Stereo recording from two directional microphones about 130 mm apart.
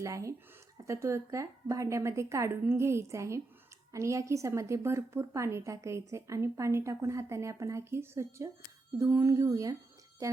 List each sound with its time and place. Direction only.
0.0 s a woman's voice: 25° right (ahead or behind)